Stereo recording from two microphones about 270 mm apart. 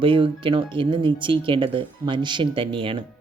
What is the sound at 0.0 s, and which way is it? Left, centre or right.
Speech, centre.